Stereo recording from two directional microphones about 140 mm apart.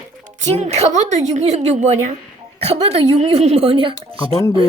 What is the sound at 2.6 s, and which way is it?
A woman's voice, 45° right (ahead or behind).